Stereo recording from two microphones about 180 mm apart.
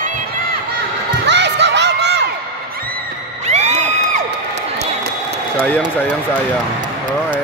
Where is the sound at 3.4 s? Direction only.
40° right (ahead or behind).